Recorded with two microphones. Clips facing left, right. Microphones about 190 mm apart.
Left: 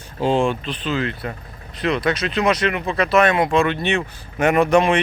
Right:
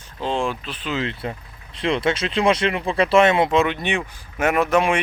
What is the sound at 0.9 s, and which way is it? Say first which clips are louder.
Speech: left 2 dB; 25° right (ahead or behind).